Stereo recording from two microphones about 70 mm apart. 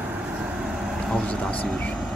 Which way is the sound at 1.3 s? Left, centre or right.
Centre.